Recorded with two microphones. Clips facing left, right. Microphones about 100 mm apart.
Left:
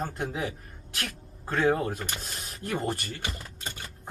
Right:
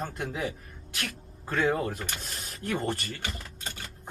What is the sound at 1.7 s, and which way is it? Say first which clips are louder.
Speech: left 1 dB; 5° left (ahead or behind).